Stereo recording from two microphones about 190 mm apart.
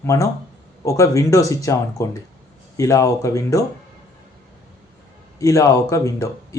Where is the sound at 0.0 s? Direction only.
15° left (ahead or behind).